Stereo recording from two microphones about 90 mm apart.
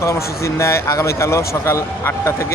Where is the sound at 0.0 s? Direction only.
35° left (ahead or behind).